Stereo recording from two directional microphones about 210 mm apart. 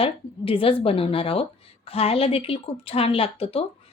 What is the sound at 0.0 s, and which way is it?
Speech, 25° left (ahead or behind).